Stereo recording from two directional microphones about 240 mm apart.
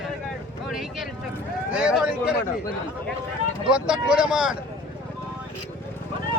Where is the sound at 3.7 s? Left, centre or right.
Centre.